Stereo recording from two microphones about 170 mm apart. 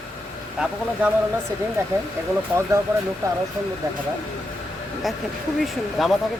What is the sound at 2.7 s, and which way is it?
Speech, 15° right (ahead or behind).